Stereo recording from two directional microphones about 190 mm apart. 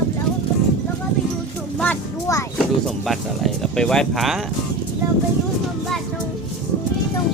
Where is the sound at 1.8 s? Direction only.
10° left (ahead or behind).